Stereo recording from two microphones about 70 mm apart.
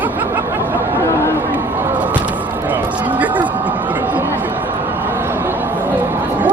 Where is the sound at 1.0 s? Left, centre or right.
Left.